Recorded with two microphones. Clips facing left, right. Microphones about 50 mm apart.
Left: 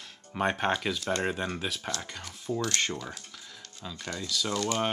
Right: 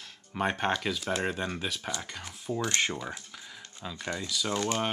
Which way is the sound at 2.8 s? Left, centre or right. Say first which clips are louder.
Right 1 dB; centre.